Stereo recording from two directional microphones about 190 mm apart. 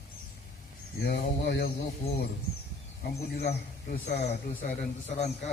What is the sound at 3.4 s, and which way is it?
A man's voice, 35° left (ahead or behind).